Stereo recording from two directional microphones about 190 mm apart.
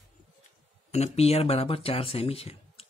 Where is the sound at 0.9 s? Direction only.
35° left (ahead or behind).